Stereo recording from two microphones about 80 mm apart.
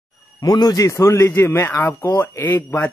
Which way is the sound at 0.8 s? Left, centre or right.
Left.